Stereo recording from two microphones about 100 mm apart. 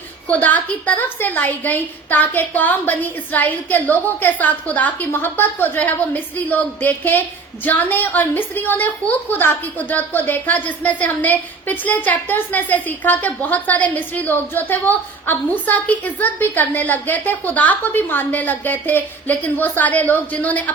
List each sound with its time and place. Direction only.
0.3 s a woman's voice: 15° left (ahead or behind)